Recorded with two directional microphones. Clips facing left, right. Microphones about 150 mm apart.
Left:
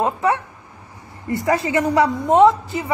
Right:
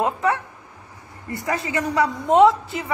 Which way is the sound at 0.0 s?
15° left (ahead or behind).